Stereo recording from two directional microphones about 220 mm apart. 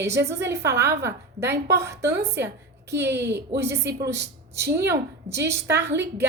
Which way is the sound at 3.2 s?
50° right (ahead or behind).